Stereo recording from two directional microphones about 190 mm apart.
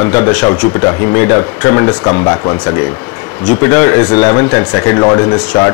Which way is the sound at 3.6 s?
15° left (ahead or behind).